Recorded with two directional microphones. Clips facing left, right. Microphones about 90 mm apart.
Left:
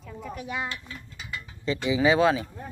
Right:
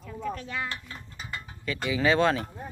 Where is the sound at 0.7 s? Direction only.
35° right (ahead or behind).